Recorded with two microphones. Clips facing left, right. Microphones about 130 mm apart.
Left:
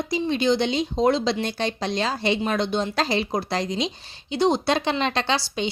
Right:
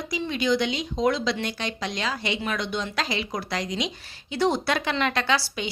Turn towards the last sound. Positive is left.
turn(degrees=25)  # may be behind; listen again after turning